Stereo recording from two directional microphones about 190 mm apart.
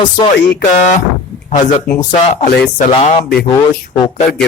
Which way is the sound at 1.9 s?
20° left (ahead or behind).